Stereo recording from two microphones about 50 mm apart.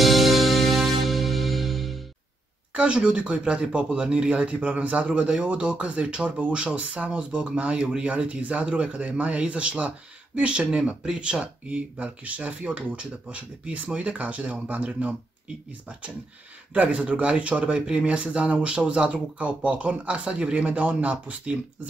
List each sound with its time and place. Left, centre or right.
0.0 s music: centre
2.7 s speech: right
16.7 s speech: right